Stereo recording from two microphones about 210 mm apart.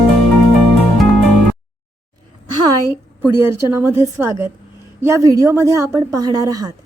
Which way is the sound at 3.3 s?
10° right (ahead or behind).